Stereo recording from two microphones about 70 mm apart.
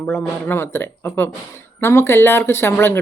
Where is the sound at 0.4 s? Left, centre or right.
Left.